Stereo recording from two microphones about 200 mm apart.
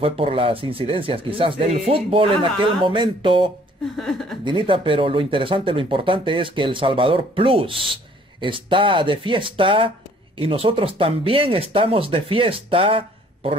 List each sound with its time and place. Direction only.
0.0 s speech: 25° right (ahead or behind)
3.9 s speech: 5° left (ahead or behind)
4.5 s speech: 25° right (ahead or behind)